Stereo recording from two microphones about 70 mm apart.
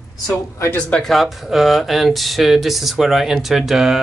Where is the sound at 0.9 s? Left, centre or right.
Centre.